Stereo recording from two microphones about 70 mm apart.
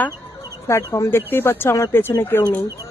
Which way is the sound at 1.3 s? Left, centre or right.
Left.